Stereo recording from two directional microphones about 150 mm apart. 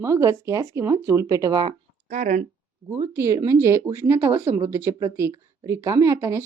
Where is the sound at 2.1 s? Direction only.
55° right (ahead or behind).